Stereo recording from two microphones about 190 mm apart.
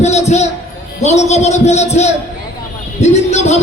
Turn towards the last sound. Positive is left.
turn(degrees=35)  # may be behind; listen again after turning